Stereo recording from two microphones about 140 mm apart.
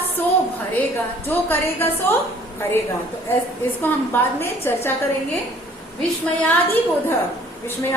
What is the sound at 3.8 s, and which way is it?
A woman's voice, 15° left (ahead or behind).